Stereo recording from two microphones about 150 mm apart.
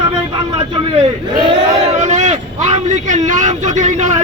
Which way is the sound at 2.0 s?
50° right (ahead or behind).